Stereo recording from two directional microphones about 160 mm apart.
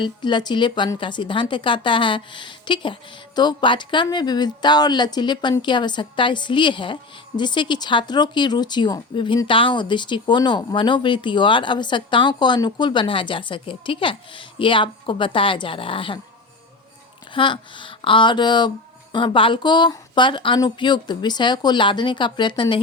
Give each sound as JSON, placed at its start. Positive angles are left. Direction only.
{"t": 0.0, "sound": "a woman's voice", "side_deg": 30}
{"t": 17.3, "sound": "a woman's voice", "side_deg": 30}